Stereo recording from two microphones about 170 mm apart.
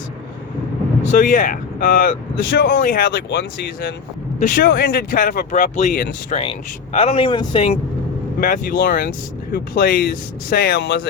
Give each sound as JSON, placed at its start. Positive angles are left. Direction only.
{"t": 1.2, "sound": "speech", "side_deg": 50}
{"t": 3.1, "sound": "speech", "side_deg": 90}
{"t": 4.4, "sound": "speech", "side_deg": 50}
{"t": 6.3, "sound": "speech", "side_deg": 35}
{"t": 8.4, "sound": "speech", "side_deg": 55}